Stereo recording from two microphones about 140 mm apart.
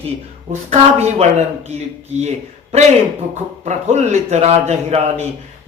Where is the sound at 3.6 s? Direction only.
55° right (ahead or behind).